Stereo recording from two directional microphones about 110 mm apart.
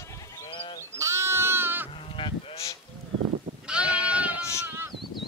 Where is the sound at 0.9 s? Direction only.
25° right (ahead or behind).